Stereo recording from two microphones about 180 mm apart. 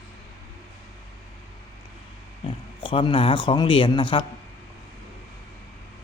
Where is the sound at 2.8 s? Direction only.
30° left (ahead or behind).